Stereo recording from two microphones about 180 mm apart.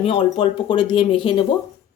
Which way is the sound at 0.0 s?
30° left (ahead or behind).